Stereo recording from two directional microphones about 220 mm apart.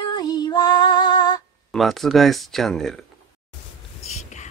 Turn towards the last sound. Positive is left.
turn(degrees=30)  # may be behind; listen again after turning